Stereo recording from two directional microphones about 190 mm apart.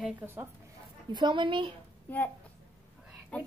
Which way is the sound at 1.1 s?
25° right (ahead or behind).